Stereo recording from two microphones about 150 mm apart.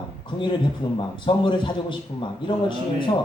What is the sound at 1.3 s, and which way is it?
A man's voice, 30° left (ahead or behind).